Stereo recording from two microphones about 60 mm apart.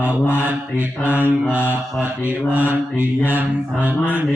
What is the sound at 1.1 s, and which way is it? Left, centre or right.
Mantra, right.